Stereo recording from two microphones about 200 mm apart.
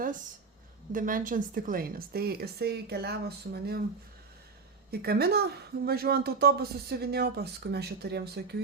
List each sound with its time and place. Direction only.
0.9 s a woman's voice: 40° right (ahead or behind)
4.9 s a woman's voice: 50° right (ahead or behind)